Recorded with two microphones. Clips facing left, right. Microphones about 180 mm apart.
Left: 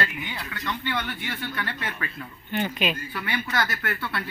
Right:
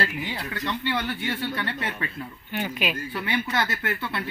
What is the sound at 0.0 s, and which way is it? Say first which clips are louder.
Speech: right 2 dB; 30° right (ahead or behind).